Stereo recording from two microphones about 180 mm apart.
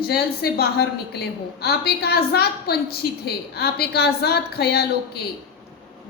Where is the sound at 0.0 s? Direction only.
60° left (ahead or behind).